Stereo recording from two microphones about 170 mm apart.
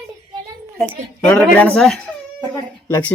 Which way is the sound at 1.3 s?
10° left (ahead or behind).